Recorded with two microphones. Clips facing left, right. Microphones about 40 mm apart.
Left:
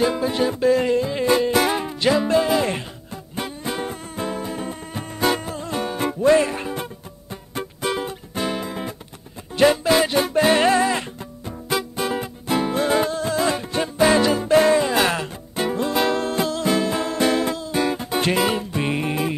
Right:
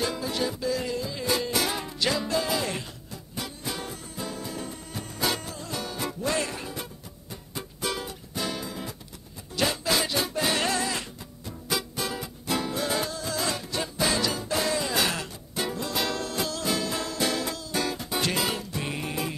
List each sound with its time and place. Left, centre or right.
0.0 s music: left
1.8 s music: left